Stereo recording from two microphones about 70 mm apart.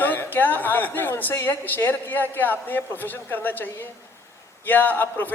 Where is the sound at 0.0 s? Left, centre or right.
Left.